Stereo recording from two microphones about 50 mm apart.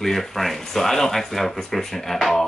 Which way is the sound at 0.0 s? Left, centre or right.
Centre.